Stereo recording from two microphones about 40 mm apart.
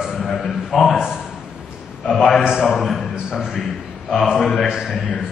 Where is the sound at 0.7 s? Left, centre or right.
Centre.